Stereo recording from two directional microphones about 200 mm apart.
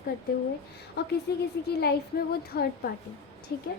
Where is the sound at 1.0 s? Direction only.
55° left (ahead or behind).